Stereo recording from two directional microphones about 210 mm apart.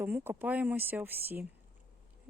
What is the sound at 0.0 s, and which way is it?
Speech, 10° right (ahead or behind).